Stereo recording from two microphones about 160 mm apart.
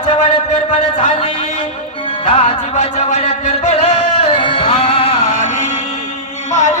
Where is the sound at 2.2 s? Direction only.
40° left (ahead or behind).